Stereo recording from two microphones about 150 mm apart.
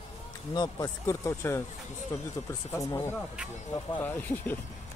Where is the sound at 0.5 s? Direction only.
25° left (ahead or behind).